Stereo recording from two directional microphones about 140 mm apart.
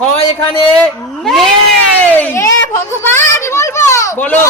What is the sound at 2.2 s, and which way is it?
A child's voice, 20° left (ahead or behind).